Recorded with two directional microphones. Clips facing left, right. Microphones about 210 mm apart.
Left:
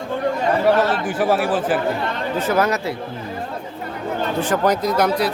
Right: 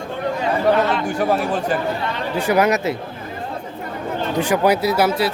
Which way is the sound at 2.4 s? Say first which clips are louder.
Right 3 dB; 15° right (ahead or behind).